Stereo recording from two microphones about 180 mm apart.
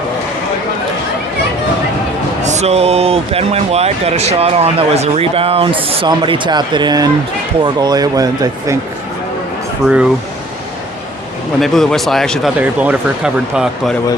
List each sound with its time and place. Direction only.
2.4 s speech: 40° right (ahead or behind); by 8.8 s 20° right (ahead or behind)
9.8 s speech: 5° right (ahead or behind)
11.6 s speech: centre (ahead or behind)